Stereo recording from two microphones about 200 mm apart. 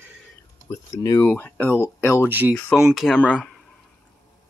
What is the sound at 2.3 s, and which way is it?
Speech, 10° right (ahead or behind).